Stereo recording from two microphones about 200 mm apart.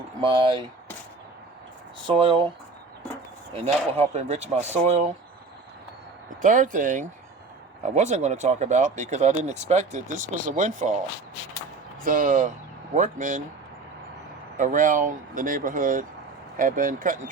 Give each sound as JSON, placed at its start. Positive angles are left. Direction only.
{"t": 0.2, "sound": "speech", "side_deg": -25}
{"t": 2.0, "sound": "speech", "side_deg": -25}
{"t": 3.5, "sound": "speech", "side_deg": -30}
{"t": 6.4, "sound": "speech", "side_deg": -40}
{"t": 12.0, "sound": "speech", "side_deg": -40}
{"t": 14.6, "sound": "speech", "side_deg": -40}